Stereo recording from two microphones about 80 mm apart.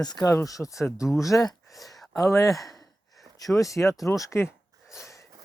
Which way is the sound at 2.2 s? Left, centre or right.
Left.